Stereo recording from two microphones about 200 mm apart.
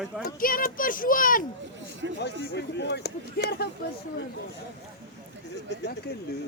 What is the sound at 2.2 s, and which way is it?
Speech, 60° left (ahead or behind).